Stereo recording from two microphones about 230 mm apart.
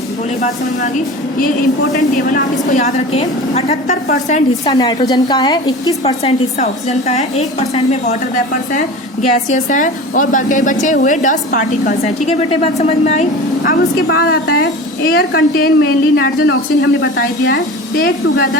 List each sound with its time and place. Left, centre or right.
1.9 s speech: centre
2.3 s a woman's voice: left
4.7 s a woman's voice: centre
9.3 s a woman's voice: left
13.6 s a woman's voice: left